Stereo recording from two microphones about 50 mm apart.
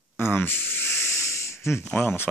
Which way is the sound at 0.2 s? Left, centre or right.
Left.